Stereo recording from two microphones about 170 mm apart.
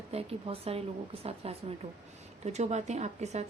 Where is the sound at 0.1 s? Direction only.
35° right (ahead or behind).